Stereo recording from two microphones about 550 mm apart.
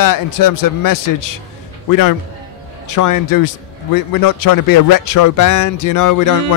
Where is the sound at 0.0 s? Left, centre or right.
Left.